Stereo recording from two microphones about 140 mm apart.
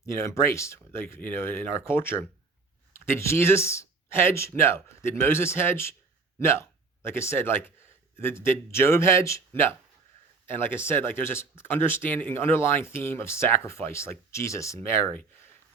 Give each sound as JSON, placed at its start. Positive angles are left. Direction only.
{"t": 0.0, "sound": "speech", "side_deg": 20}